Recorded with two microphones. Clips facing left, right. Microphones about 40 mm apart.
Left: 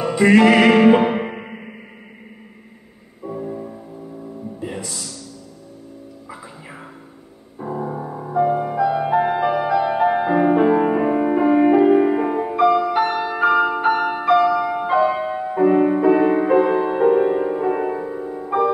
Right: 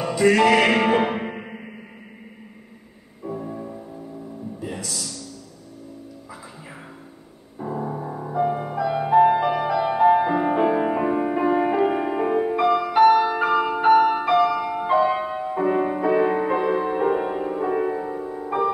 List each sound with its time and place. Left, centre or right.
0.1 s music: left
0.4 s music: centre
3.3 s music: centre
4.6 s music: left
7.5 s music: centre
13.5 s change ringing: centre
13.7 s music: centre